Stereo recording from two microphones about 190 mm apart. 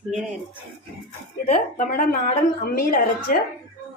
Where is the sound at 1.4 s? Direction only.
40° left (ahead or behind).